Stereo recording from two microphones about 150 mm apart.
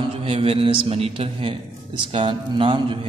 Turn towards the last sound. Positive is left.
turn(degrees=-35)  # may be behind; listen again after turning